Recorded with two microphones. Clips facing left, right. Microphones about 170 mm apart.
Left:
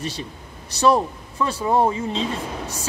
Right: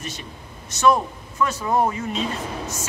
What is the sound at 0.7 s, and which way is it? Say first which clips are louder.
A woman's voice: left 1 dB; 35° left (ahead or behind).